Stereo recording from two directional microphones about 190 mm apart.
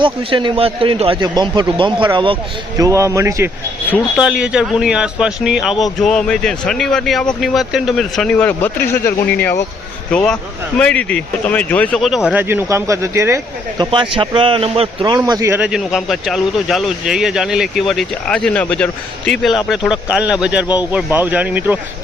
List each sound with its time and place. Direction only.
0.0 s a man's voice: 25° right (ahead or behind); by 21.8 s 10° right (ahead or behind)